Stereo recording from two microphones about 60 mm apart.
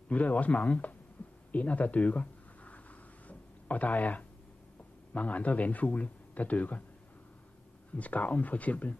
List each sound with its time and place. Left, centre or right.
0.1 s a man's voice: left
1.5 s a sound: left
5.1 s a man's voice: left
7.9 s a man's voice: left